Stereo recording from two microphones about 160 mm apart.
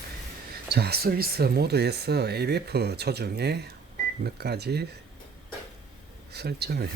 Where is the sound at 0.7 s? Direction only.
85° right.